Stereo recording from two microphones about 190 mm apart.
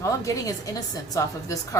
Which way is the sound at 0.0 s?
20° left (ahead or behind).